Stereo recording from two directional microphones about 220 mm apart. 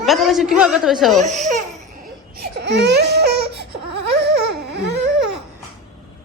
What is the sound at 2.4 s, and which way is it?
Crying, 50° right (ahead or behind).